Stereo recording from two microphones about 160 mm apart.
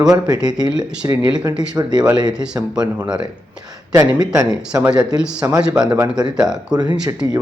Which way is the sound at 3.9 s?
15° right (ahead or behind).